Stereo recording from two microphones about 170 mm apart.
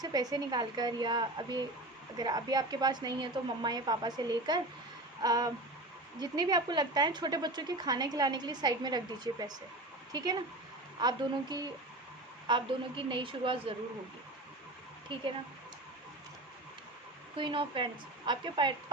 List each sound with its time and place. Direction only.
0.0 s a woman's voice: 20° right (ahead or behind)
17.3 s a woman's voice: 30° right (ahead or behind)